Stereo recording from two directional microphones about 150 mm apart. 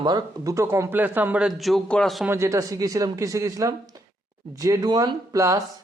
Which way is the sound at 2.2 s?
15° right (ahead or behind).